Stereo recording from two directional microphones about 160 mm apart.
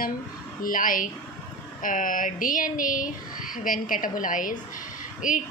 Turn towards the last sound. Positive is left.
turn(degrees=55)  # may be behind; listen again after turning